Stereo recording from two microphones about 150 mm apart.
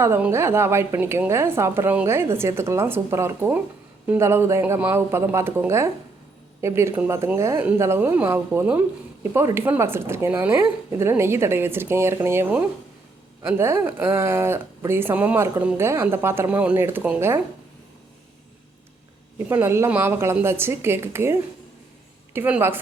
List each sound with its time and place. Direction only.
0.0 s speech: 15° right (ahead or behind)
19.5 s a woman's voice: 15° right (ahead or behind)